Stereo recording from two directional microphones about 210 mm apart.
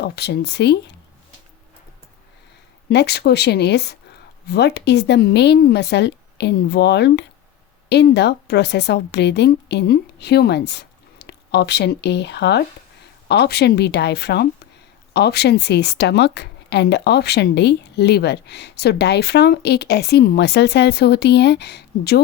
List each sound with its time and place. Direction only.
0.0 s a woman's voice: 50° left (ahead or behind)
2.9 s a woman's voice: 50° left (ahead or behind)